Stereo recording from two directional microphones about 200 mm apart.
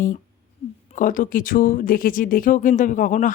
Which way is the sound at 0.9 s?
40° left (ahead or behind).